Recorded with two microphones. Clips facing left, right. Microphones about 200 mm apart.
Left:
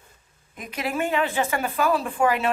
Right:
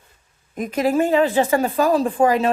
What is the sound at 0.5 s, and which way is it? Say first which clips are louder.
A woman's voice: right 9 dB; 45° right (ahead or behind).